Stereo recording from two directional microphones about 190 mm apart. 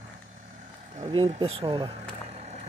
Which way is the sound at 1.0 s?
30° right (ahead or behind).